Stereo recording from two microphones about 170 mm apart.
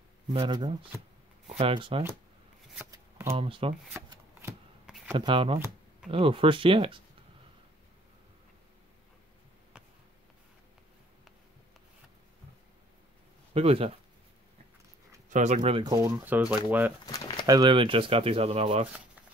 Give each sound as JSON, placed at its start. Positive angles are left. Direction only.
{"t": 0.3, "sound": "speech", "side_deg": -25}
{"t": 2.9, "sound": "shuffling cards", "side_deg": -15}
{"t": 3.3, "sound": "speech", "side_deg": -30}
{"t": 5.2, "sound": "speech", "side_deg": -30}
{"t": 13.5, "sound": "speech", "side_deg": -35}
{"t": 15.2, "sound": "speech", "side_deg": -45}
{"t": 15.8, "sound": "speech", "side_deg": -25}
{"t": 16.5, "sound": "speech", "side_deg": -10}
{"t": 17.0, "sound": "pigeon", "side_deg": 20}
{"t": 17.5, "sound": "speech", "side_deg": -25}